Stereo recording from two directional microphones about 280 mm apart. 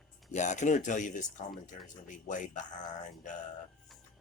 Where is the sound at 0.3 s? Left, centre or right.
Left.